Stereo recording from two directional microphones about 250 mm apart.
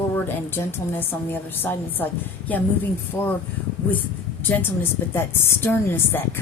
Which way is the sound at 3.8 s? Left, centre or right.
Centre.